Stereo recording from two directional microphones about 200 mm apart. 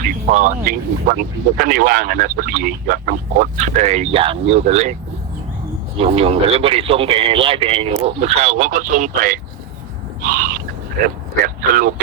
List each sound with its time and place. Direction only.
0.0 s speech: 40° right (ahead or behind)
6.0 s a man's voice: 30° right (ahead or behind)